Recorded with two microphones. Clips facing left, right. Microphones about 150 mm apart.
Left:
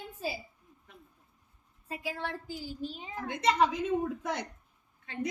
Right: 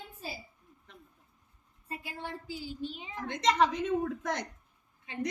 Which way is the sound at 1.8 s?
90° left.